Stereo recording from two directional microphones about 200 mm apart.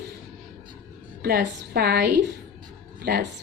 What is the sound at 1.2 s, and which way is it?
A woman's voice, 50° right (ahead or behind).